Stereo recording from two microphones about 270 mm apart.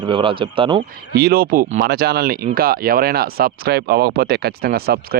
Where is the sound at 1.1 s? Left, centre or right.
Right.